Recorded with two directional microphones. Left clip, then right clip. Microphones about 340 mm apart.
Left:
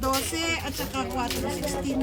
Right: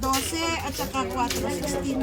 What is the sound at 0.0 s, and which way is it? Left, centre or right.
A child's voice, centre.